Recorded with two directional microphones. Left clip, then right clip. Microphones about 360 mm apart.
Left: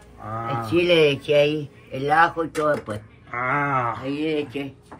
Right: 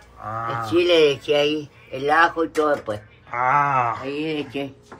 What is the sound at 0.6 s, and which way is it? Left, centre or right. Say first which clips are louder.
Speech: right 1 dB; right.